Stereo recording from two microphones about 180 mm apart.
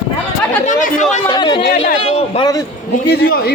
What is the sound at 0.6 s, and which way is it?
Speech, 45° left (ahead or behind).